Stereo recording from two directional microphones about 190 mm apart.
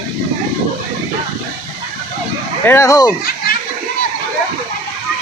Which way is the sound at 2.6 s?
15° left (ahead or behind).